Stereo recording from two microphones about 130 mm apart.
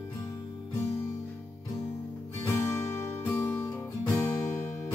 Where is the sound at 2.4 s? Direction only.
20° left (ahead or behind).